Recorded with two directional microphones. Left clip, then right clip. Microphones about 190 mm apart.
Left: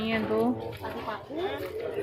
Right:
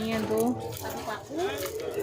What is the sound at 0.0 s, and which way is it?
Speech, 20° right (ahead or behind).